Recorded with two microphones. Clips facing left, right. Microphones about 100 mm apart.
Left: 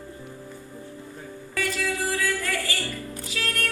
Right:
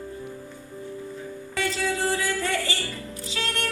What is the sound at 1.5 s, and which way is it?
Music, 25° right (ahead or behind).